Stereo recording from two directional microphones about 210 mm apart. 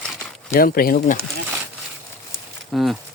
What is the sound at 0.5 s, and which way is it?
Speech, 45° left (ahead or behind).